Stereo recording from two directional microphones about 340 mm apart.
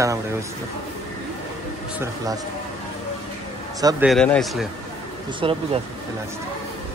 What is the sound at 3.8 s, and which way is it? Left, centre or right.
Speech, centre.